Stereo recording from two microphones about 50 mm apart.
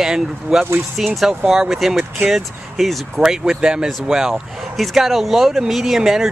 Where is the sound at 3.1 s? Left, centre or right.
Centre.